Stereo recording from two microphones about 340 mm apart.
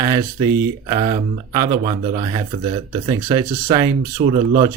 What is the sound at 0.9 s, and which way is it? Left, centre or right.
Speech, centre.